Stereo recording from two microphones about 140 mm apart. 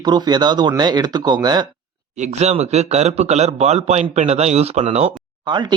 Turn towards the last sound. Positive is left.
turn(degrees=-35)  # may be behind; listen again after turning